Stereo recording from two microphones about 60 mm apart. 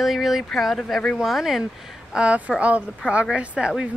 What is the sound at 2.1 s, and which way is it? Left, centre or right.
Speech, right.